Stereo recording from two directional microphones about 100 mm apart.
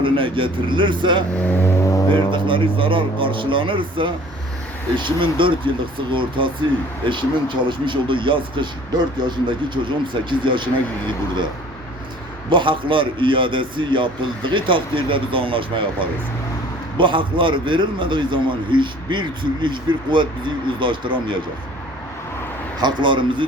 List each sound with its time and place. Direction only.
0.0 s speech: 60° right (ahead or behind)
1.5 s vehicle: 20° left (ahead or behind)
2.1 s a man's voice: 55° right (ahead or behind)
12.5 s a man's voice: 55° right (ahead or behind)
22.8 s a man's voice: 50° right (ahead or behind)